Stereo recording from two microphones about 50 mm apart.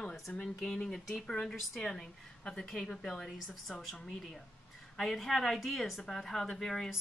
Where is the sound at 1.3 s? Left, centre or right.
Centre.